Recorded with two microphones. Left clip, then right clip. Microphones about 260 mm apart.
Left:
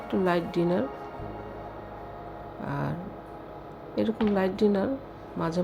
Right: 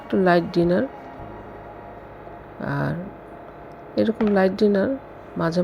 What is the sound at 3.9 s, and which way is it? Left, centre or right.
Speech, centre.